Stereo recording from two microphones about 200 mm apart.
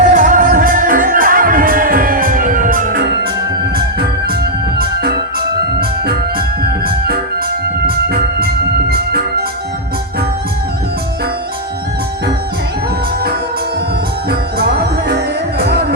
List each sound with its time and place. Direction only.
0.0 s music: 40° right (ahead or behind)
5.8 s organ: 50° right (ahead or behind)
7.9 s music: 50° right (ahead or behind)
14.3 s music: 50° right (ahead or behind)